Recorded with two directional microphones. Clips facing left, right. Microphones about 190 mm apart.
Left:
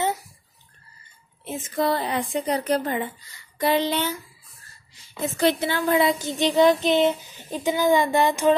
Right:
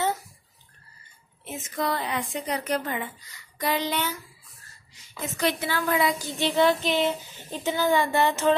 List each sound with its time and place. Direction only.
1.4 s a woman's voice: 30° left (ahead or behind); by 8.5 s 15° left (ahead or behind)